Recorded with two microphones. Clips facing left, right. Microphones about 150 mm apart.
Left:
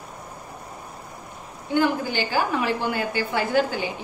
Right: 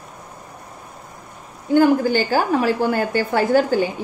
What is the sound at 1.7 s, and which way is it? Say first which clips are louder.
A woman's voice: right 8 dB; 45° right (ahead or behind).